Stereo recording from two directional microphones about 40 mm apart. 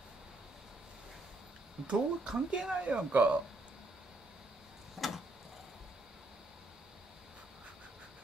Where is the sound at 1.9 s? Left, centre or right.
Right.